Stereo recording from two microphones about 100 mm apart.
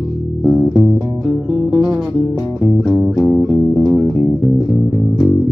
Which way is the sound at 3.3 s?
10° right (ahead or behind).